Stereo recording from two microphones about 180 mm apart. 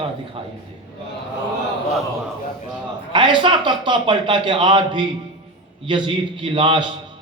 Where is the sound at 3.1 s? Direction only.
25° right (ahead or behind).